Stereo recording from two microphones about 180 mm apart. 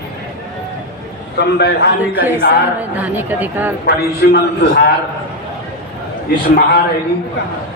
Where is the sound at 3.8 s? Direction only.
60° left (ahead or behind).